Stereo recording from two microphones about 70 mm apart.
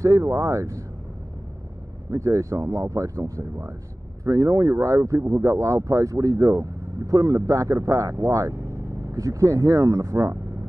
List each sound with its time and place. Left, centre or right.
0.0 s speech: right
2.0 s speech: right